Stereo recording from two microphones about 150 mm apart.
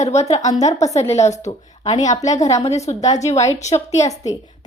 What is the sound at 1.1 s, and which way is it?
Speech, 50° left (ahead or behind).